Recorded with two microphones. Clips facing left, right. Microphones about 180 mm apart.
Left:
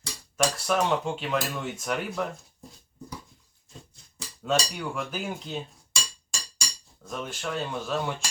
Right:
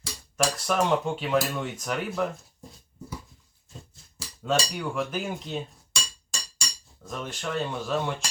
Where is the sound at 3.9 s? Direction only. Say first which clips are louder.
Even; centre (ahead or behind).